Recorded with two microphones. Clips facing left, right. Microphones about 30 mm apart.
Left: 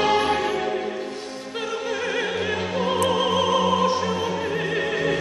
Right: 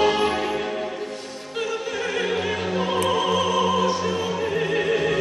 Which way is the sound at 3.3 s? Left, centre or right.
Centre.